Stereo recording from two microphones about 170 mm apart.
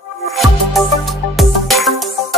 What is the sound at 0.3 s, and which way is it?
Music, centre (ahead or behind).